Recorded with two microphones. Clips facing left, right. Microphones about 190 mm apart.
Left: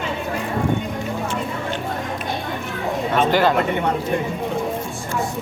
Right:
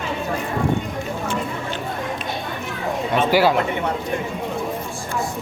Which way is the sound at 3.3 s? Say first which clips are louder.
Right 2 dB; 10° right (ahead or behind).